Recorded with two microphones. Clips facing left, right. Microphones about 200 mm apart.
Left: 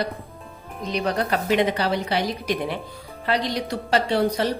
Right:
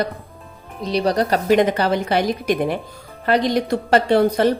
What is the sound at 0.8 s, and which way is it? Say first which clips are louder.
A woman's voice: right 5 dB; 35° right (ahead or behind).